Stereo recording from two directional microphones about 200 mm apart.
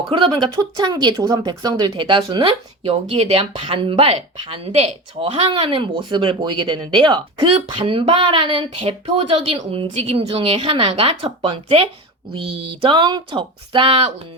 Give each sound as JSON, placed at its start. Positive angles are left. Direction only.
{"t": 0.1, "sound": "speech", "side_deg": -25}